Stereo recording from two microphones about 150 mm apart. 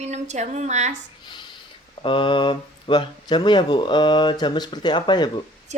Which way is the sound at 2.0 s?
35° left (ahead or behind).